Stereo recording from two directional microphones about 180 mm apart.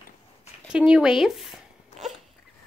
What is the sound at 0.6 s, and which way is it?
Speech, 5° right (ahead or behind).